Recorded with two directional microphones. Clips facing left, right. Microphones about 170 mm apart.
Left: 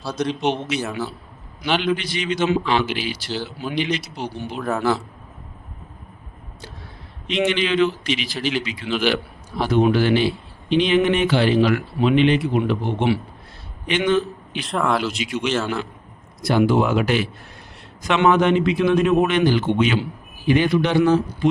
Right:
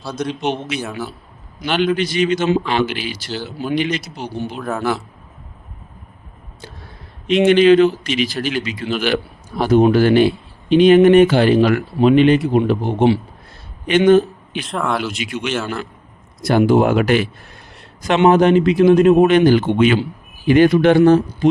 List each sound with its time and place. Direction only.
0.2 s speech: 5° right (ahead or behind)
2.0 s speech: 45° right (ahead or behind)
3.4 s speech: 5° right (ahead or behind)
7.3 s a man's voice: 45° right (ahead or behind)
14.6 s speech: centre (ahead or behind)
15.1 s speech: 55° right (ahead or behind)
15.4 s speech: 5° right (ahead or behind)
16.4 s speech: 45° right (ahead or behind)
18.3 s speech: 40° right (ahead or behind)